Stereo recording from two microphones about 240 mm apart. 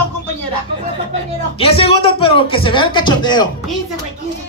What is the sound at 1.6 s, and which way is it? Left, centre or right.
Speech, left.